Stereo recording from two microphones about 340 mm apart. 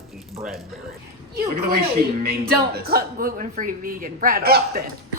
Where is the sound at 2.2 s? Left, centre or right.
Right.